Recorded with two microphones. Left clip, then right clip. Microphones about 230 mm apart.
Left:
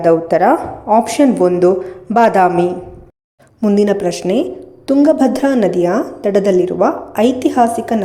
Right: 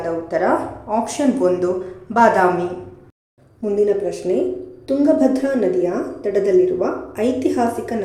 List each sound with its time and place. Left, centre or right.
0.0 s a woman's voice: left
3.6 s a woman's voice: left